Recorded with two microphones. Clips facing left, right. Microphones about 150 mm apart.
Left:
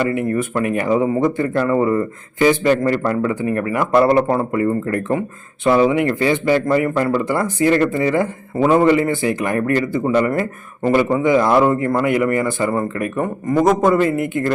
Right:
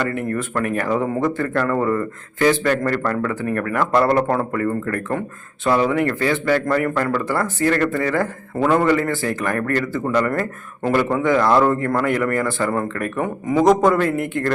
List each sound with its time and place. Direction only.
0.1 s a man's voice: 15° left (ahead or behind)